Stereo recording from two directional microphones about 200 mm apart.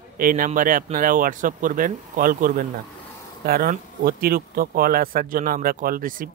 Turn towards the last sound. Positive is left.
turn(degrees=-45)  # may be behind; listen again after turning